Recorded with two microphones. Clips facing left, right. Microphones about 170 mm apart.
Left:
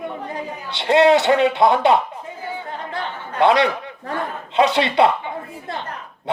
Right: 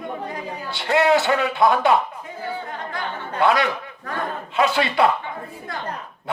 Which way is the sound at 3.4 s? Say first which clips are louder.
Left 4 dB; 25° left (ahead or behind).